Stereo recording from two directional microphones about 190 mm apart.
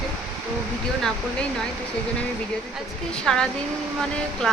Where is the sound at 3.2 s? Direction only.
5° left (ahead or behind).